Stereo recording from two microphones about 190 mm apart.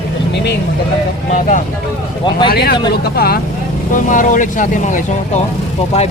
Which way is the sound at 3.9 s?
45° left (ahead or behind).